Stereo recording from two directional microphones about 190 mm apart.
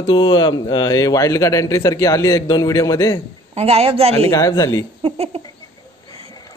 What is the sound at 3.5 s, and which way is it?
Speech, 30° right (ahead or behind).